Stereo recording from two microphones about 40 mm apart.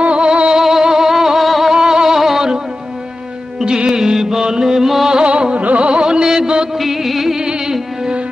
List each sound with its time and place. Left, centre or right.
0.0 s music: right
0.6 s music: centre
3.6 s music: right
5.2 s carnatic music: right
5.9 s music: right
6.8 s music: centre
7.4 s music: centre